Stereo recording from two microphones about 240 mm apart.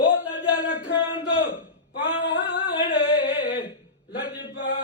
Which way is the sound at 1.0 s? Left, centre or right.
Left.